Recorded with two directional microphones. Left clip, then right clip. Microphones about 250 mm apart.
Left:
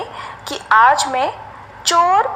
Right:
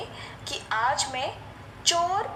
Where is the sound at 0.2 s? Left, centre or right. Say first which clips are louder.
Left 9 dB; left.